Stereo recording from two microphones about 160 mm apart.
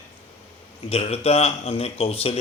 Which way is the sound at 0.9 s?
40° left (ahead or behind).